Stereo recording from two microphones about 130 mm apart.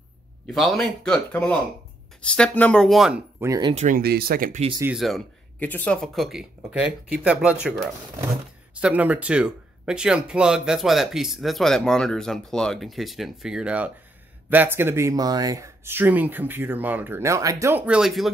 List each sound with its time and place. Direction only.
0.5 s speech: centre (ahead or behind)
3.3 s speech: 25° right (ahead or behind)
3.7 s speech: 85° right
4.9 s speech: centre (ahead or behind)
5.6 s speech: 10° left (ahead or behind)
5.9 s speech: centre (ahead or behind); by 17.8 s 20° right (ahead or behind)
17.8 s speech: 5° right (ahead or behind)